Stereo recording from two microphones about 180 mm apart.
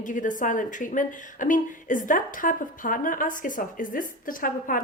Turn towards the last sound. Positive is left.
turn(degrees=50)  # may be behind; listen again after turning